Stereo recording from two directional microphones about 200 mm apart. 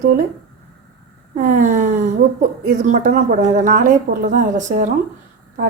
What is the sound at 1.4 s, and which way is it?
A woman's voice, 40° right (ahead or behind).